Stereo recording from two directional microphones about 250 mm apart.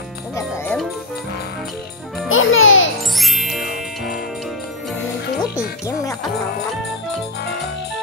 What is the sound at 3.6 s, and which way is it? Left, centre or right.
Music, left.